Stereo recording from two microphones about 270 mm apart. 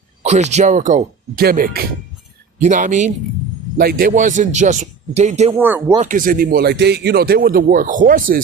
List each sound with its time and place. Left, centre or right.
0.2 s a man's voice: right
5.5 s speech: centre
6.0 s speech: right